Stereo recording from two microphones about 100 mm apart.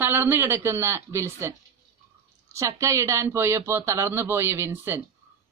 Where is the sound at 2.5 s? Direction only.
30° right (ahead or behind).